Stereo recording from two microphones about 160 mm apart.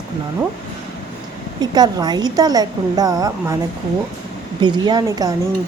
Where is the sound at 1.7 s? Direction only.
25° right (ahead or behind).